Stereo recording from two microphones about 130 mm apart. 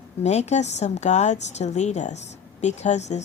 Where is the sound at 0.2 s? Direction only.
60° left (ahead or behind).